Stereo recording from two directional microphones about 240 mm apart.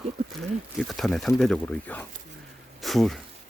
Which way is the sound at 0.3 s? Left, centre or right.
Centre.